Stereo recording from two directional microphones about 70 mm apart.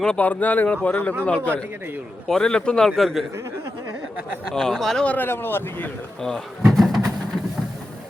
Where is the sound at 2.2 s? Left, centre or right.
Centre.